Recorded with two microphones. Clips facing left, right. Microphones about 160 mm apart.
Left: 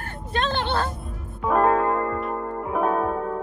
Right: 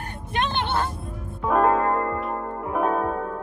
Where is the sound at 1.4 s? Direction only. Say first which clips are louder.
Even; centre (ahead or behind).